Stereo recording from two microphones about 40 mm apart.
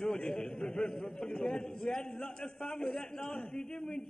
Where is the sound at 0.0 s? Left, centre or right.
Centre.